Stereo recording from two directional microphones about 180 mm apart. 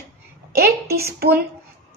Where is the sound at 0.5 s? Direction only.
60° right (ahead or behind).